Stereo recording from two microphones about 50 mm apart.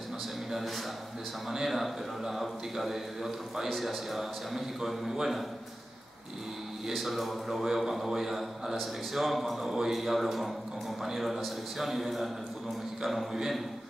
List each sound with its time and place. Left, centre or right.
1.5 s a man's voice: centre
6.9 s a man's voice: centre